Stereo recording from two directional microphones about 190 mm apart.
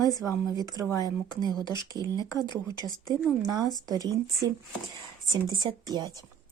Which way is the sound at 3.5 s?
20° right (ahead or behind).